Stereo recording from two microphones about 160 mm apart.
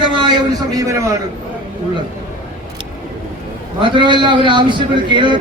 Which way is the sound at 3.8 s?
30° right (ahead or behind).